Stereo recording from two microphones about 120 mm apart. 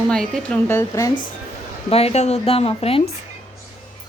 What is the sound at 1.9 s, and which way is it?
A woman's voice, 60° left (ahead or behind).